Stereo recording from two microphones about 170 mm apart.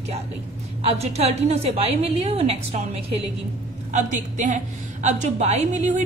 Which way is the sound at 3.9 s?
45° right (ahead or behind).